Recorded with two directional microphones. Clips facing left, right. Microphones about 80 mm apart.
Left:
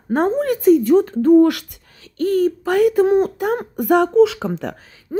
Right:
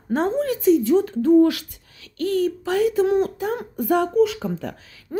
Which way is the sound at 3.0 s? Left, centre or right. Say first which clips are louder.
Left 4 dB; left.